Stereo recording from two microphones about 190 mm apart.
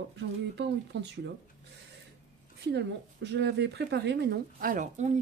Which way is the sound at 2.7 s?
65° right (ahead or behind).